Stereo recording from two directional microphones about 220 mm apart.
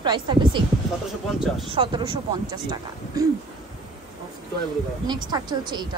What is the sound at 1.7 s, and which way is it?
Speech, 25° right (ahead or behind).